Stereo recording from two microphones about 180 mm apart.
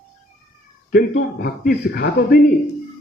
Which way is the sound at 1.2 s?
60° left (ahead or behind).